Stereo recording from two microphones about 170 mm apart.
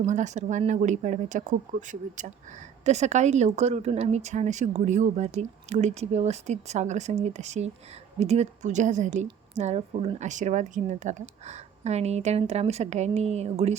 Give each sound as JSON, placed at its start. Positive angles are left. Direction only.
{"t": 0.0, "sound": "speech", "side_deg": -45}